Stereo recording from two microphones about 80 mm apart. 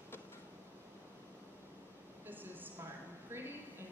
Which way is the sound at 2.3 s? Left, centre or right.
Right.